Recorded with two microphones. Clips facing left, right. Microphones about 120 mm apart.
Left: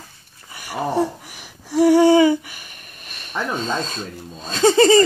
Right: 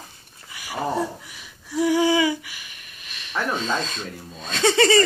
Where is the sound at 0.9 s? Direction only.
65° left (ahead or behind).